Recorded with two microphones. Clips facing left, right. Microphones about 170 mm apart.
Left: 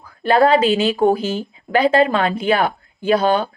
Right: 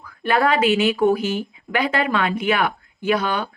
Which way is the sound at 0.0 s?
30° left (ahead or behind).